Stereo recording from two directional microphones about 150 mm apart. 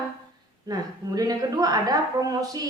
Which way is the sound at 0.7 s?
25° right (ahead or behind).